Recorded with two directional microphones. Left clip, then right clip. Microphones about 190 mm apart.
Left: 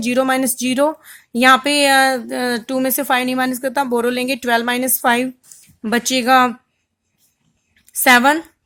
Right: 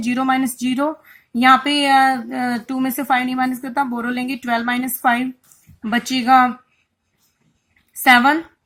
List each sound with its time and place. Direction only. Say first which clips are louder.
0.0 s speech: left 2 dB; 45° left (ahead or behind)
8.0 s speech: left 1 dB; 45° left (ahead or behind)